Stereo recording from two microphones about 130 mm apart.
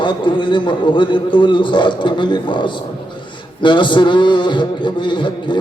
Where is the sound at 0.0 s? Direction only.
35° left (ahead or behind).